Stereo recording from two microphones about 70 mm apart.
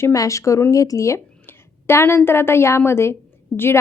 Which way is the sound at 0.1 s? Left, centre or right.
Left.